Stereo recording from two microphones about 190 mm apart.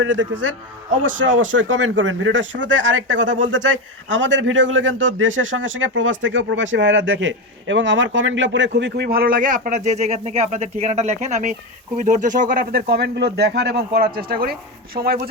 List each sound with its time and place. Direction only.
0.0 s a man's voice: 80° right; by 15.3 s 55° right (ahead or behind)